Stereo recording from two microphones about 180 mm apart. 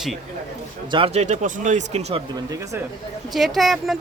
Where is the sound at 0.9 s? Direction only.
30° right (ahead or behind).